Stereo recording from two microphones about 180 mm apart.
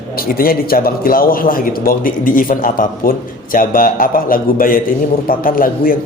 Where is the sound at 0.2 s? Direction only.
55° left (ahead or behind).